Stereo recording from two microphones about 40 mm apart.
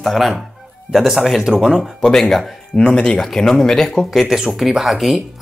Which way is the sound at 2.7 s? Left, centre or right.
Left.